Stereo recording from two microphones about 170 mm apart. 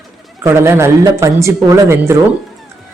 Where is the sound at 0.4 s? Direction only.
15° right (ahead or behind).